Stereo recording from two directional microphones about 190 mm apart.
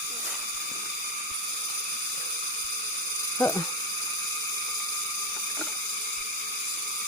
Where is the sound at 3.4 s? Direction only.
15° left (ahead or behind).